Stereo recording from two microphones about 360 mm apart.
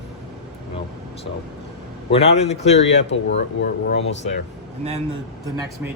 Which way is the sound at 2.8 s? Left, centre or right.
Left.